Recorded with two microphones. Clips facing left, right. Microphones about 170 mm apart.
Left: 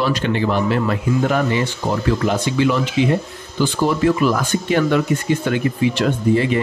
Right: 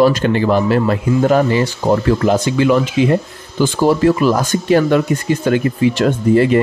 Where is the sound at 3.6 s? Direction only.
40° right (ahead or behind).